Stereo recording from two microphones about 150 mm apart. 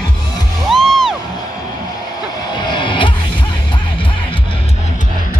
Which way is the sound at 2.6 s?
30° left (ahead or behind).